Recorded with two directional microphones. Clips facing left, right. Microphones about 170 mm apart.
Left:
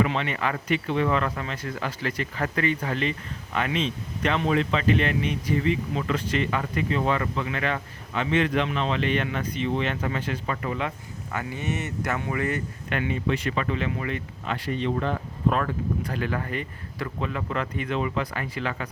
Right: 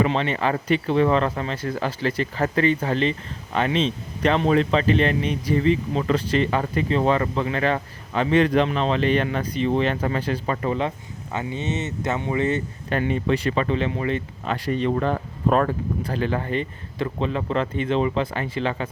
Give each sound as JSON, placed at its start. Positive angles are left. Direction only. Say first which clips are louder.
{"t": 0.0, "sound": "speech", "louder": "right 4 dB", "side_deg": -30}
{"t": 13.0, "sound": "speech", "louder": "right 4 dB", "side_deg": -35}